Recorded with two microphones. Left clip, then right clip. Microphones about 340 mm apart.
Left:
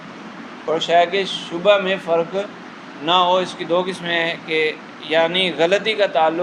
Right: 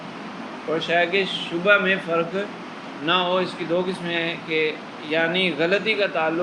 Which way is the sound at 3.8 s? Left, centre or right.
Centre.